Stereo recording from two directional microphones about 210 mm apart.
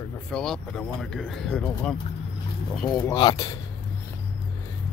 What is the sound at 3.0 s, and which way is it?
Speech, 20° left (ahead or behind).